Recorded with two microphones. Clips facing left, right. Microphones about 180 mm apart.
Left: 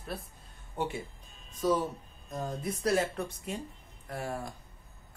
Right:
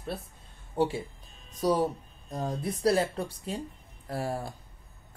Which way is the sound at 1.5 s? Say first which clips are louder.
Right 3 dB; 40° right (ahead or behind).